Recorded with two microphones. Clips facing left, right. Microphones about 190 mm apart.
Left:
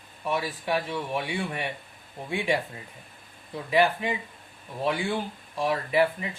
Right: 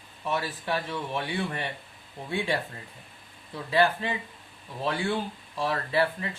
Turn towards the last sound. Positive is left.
turn(degrees=15)  # may be behind; listen again after turning